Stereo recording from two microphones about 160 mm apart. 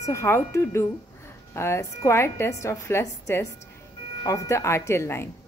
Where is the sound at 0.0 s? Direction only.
15° left (ahead or behind).